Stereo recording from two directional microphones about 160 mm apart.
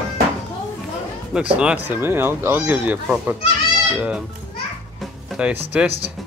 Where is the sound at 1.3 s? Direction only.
5° right (ahead or behind).